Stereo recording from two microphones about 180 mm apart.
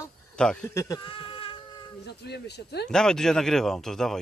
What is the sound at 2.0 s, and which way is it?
Speech, 65° left (ahead or behind).